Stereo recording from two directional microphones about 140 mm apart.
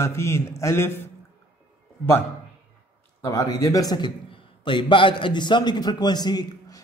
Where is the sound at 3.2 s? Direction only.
20° left (ahead or behind).